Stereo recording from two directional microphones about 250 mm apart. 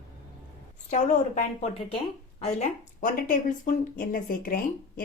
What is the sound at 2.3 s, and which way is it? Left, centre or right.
Speech, left.